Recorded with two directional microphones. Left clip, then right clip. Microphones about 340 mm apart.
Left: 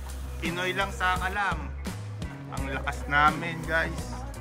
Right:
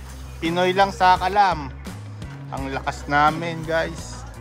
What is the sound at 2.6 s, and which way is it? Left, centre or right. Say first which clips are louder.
Music: right 5 dB; centre.